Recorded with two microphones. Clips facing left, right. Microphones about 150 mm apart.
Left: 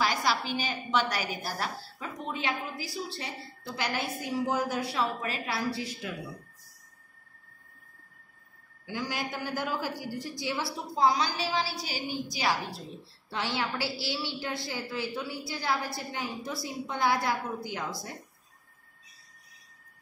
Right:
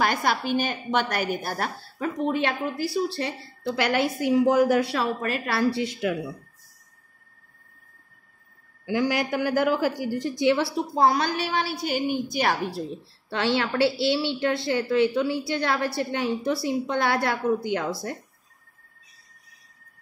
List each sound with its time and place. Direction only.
0.0 s a woman's voice: 55° right (ahead or behind); by 6.1 s 75° right (ahead or behind)
8.8 s a woman's voice: 70° right (ahead or behind)
13.3 s a woman's voice: 70° right (ahead or behind)